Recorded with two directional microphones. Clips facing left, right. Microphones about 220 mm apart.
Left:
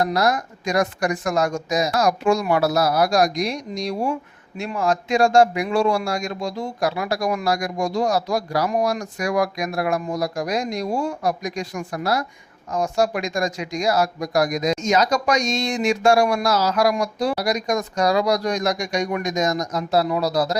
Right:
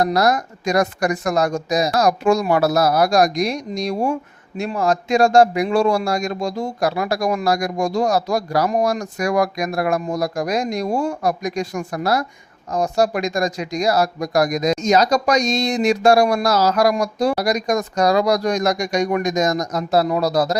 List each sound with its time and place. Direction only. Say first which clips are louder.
0.0 s speech: right 3 dB; 40° right (ahead or behind)